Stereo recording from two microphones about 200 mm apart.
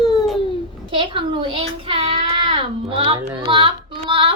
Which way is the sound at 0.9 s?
25° right (ahead or behind).